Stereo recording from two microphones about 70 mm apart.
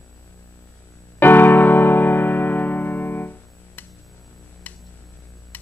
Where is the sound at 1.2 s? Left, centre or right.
Left.